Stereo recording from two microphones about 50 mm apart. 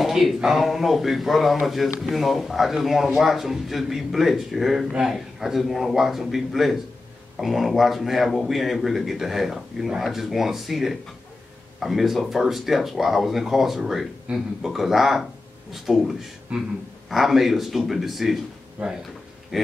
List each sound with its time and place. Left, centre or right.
0.0 s speech: centre
16.5 s speech: right
17.1 s speech: centre
18.8 s speech: right
19.5 s speech: centre